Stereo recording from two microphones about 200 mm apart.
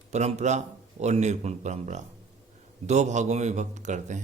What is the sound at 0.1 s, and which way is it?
Speech, 35° right (ahead or behind).